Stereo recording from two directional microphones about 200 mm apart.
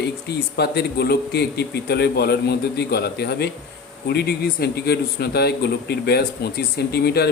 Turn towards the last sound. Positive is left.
turn(degrees=55)  # may be behind; listen again after turning